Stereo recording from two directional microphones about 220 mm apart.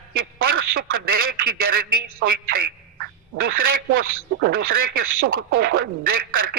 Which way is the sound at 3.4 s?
40° right (ahead or behind).